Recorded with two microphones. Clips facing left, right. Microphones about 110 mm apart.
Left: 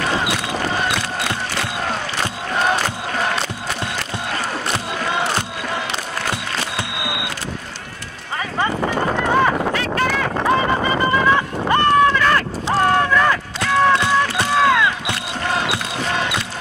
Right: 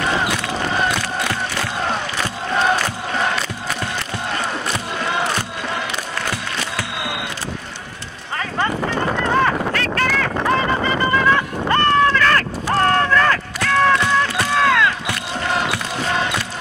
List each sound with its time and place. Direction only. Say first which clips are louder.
4.7 s a sound: left 1 dB; 25° left (ahead or behind)
6.3 s music: left 1 dB; 20° left (ahead or behind)
8.5 s clip-clop: left 1 dB; 10° left (ahead or behind)
10.5 s music: left 2 dB; 15° left (ahead or behind)